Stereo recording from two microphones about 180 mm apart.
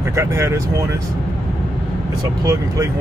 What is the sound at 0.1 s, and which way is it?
Speech, 15° right (ahead or behind).